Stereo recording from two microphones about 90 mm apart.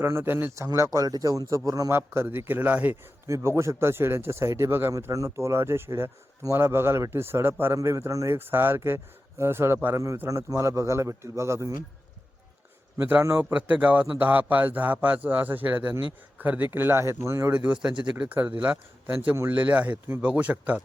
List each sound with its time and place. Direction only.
0.0 s a man's voice: 30° right (ahead or behind)
1.9 s a man's voice: 25° right (ahead or behind)
3.2 s a man's voice: 35° right (ahead or behind)
13.4 s a man's voice: 15° right (ahead or behind); by 17.5 s 35° right (ahead or behind)
17.5 s a man's voice: 15° right (ahead or behind)